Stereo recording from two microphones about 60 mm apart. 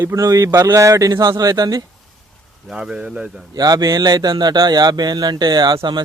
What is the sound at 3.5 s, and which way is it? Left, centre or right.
Speech, right.